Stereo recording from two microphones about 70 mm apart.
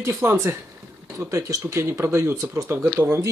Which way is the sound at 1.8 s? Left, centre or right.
Right.